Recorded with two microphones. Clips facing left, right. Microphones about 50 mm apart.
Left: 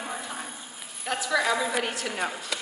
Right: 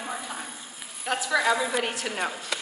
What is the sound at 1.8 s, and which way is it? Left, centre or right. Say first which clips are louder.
Speech: even; right.